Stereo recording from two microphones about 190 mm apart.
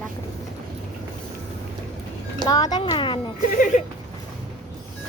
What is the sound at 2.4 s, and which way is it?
Speech, 20° left (ahead or behind).